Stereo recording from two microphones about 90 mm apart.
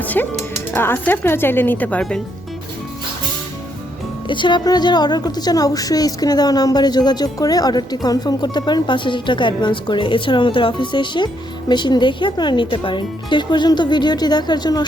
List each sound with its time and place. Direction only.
0.0 s music: 20° left (ahead or behind)
0.7 s speech: 25° left (ahead or behind)
4.3 s a woman's voice: 60° left (ahead or behind)